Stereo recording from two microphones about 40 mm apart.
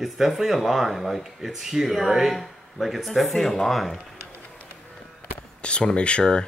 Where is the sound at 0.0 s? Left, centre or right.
Centre.